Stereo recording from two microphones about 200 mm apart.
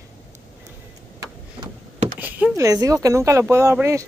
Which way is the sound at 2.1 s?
10° right (ahead or behind).